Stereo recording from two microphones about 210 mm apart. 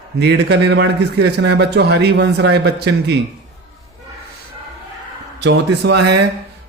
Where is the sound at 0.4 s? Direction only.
55° right (ahead or behind).